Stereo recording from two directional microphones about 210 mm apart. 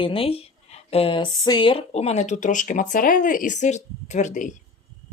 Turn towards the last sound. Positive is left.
turn(degrees=35)  # may be behind; listen again after turning